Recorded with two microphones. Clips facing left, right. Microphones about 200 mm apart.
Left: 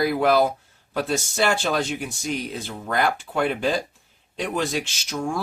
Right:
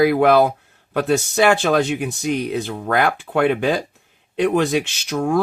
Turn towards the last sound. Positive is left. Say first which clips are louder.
# right 7 dB
turn(degrees=-60)  # may be behind; listen again after turning